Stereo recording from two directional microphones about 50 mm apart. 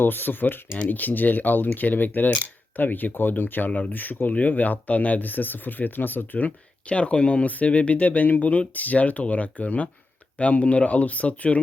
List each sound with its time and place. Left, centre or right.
0.0 s speech: left
3.7 s speech: left